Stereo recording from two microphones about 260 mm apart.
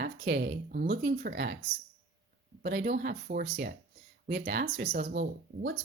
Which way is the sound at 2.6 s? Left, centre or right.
Right.